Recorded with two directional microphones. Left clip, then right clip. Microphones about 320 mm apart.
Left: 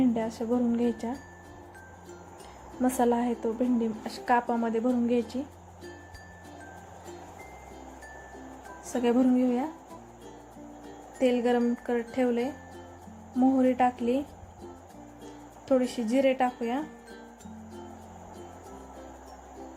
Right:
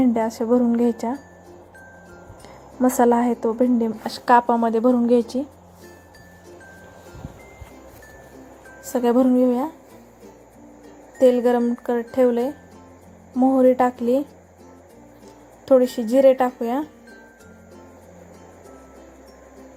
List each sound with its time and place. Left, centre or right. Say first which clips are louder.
0.0 s a woman's voice: right 8 dB; centre
2.8 s a woman's voice: right 9 dB; centre
8.9 s a woman's voice: right 7 dB; centre
11.2 s a woman's voice: right 9 dB; centre
13.4 s speech: right 8 dB; centre
15.6 s speech: right 10 dB; centre